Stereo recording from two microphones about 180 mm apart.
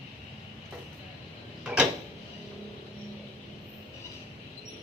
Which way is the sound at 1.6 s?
5° right (ahead or behind).